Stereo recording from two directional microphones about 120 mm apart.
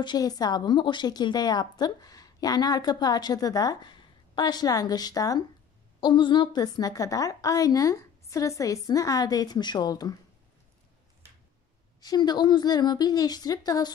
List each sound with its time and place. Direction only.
0.0 s a woman's voice: 35° left (ahead or behind)
12.0 s a woman's voice: 35° left (ahead or behind)